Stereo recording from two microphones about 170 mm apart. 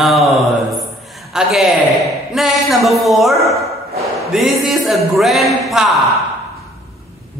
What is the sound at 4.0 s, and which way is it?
A man's voice, centre (ahead or behind).